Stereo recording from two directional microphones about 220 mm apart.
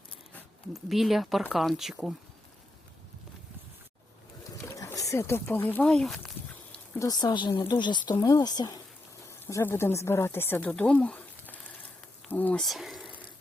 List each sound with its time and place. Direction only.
0.3 s speech: centre (ahead or behind)
4.6 s speech: 15° left (ahead or behind)
7.0 s speech: 20° left (ahead or behind)
7.8 s speech: 20° left (ahead or behind); by 13.1 s centre (ahead or behind)